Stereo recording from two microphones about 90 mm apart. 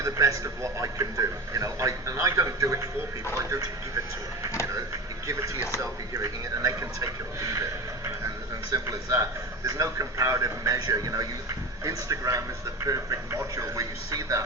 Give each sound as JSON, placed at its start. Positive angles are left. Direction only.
{"t": 0.0, "sound": "a man's voice", "side_deg": -35}
{"t": 5.8, "sound": "a man's voice", "side_deg": -35}